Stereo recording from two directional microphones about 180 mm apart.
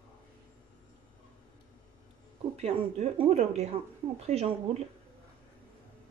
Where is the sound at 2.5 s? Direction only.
35° right (ahead or behind).